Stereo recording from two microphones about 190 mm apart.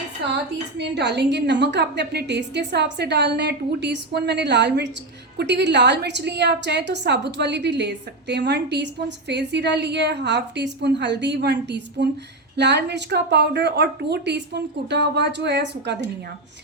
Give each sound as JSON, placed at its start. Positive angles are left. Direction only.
{"t": 0.8, "sound": "a woman's voice", "side_deg": -65}